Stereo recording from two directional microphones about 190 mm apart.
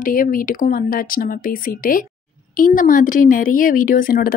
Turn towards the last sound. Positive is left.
turn(degrees=50)  # may be behind; listen again after turning